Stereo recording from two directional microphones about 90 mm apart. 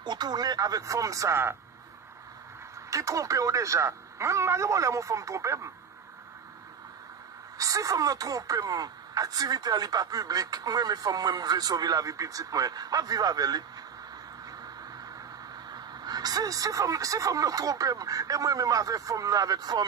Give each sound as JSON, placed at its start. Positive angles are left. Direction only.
{"t": 0.0, "sound": "speech", "side_deg": -55}
{"t": 2.9, "sound": "speech", "side_deg": -35}
{"t": 7.5, "sound": "speech", "side_deg": -40}
{"t": 15.7, "sound": "speech", "side_deg": -50}